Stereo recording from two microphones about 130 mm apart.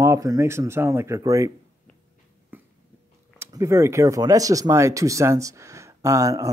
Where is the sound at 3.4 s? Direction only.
25° right (ahead or behind).